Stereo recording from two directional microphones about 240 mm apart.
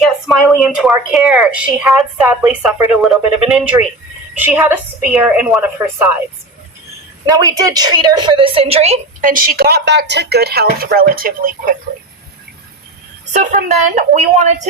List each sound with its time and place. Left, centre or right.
0.0 s a woman's voice: centre
7.3 s a woman's voice: centre; by 11.7 s right
13.3 s a woman's voice: right